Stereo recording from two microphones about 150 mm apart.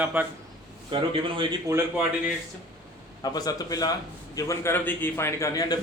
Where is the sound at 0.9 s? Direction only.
35° right (ahead or behind).